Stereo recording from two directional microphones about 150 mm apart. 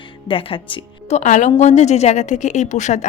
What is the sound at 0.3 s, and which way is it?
Speech, 35° left (ahead or behind).